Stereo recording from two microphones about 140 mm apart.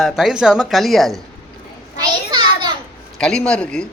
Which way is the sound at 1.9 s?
35° right (ahead or behind).